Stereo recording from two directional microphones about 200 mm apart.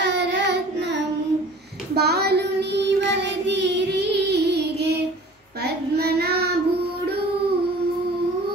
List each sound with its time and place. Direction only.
0.0 s child singing: 60° right (ahead or behind)